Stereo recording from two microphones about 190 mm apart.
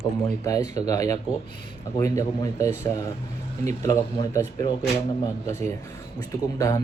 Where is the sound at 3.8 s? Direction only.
15° left (ahead or behind).